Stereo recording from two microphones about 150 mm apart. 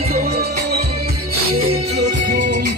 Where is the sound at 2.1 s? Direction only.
65° right (ahead or behind).